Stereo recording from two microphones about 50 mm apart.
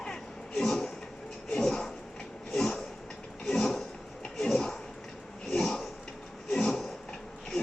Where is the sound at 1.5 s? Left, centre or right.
Centre.